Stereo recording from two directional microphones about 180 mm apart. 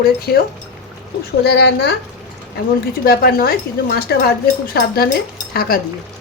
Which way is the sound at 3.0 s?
55° left (ahead or behind).